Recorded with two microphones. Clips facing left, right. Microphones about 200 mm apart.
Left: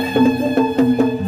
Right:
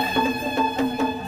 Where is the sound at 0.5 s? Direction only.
60° left (ahead or behind).